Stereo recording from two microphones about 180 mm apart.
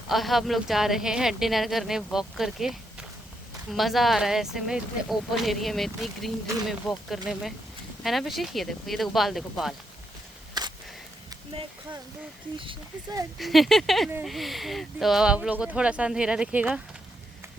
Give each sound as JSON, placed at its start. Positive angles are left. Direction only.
{"t": 0.1, "sound": "a woman's voice", "side_deg": 0}
{"t": 10.6, "sound": "a sound", "side_deg": -25}
{"t": 12.5, "sound": "speech", "side_deg": -25}
{"t": 13.4, "sound": "a woman's voice", "side_deg": 0}